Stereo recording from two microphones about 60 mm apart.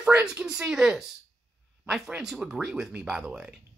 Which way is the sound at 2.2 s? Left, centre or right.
Centre.